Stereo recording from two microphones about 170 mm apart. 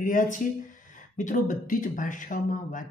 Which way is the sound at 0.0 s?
50° left (ahead or behind).